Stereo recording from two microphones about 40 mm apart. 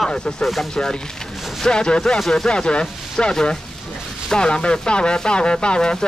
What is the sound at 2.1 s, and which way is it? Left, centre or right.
Speech, centre.